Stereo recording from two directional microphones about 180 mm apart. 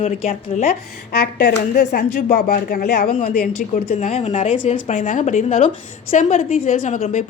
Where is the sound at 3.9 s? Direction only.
40° left (ahead or behind).